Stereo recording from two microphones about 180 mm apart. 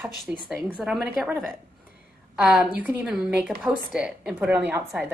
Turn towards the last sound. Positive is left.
turn(degrees=-5)  # may be behind; listen again after turning